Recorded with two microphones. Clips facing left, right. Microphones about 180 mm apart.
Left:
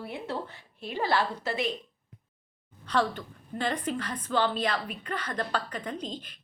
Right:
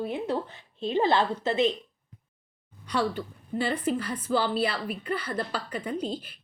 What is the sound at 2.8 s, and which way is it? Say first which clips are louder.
A woman's voice: even; 10° right (ahead or behind).